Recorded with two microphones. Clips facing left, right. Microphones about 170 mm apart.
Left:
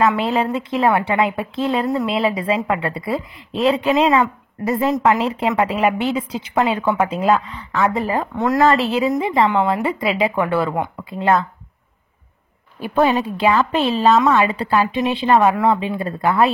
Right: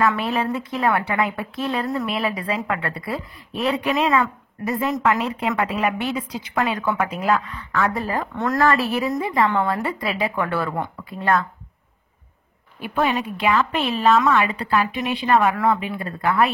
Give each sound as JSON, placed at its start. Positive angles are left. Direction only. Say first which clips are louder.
{"t": 0.0, "sound": "a woman's voice", "louder": "left 4 dB", "side_deg": 25}
{"t": 12.8, "sound": "a woman's voice", "louder": "left 5 dB", "side_deg": 40}